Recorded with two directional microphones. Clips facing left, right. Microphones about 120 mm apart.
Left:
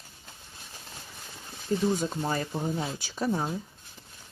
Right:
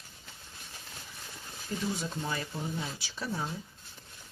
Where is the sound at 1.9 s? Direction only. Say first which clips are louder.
Left 6 dB; 40° left (ahead or behind).